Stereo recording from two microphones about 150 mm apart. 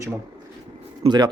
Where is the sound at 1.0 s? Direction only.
30° right (ahead or behind).